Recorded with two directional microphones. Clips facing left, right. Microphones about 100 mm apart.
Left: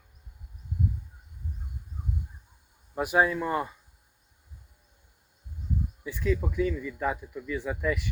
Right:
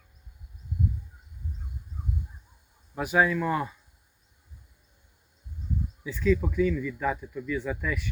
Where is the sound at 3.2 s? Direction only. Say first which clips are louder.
Right 1 dB; 25° left (ahead or behind).